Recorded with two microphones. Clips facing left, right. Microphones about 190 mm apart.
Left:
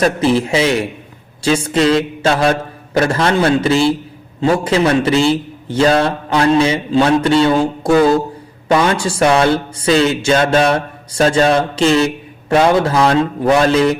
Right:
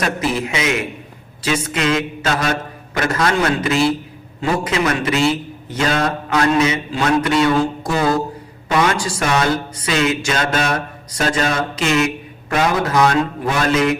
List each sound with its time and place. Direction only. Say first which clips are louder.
0.0 s a sound: left 7 dB; 30° left (ahead or behind)
4.4 s speech: left 5 dB; 30° left (ahead or behind)
8.8 s speech: left 1 dB; 30° left (ahead or behind)